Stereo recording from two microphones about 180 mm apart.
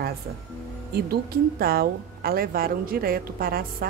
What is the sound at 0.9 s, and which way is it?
A woman's voice, 55° right (ahead or behind).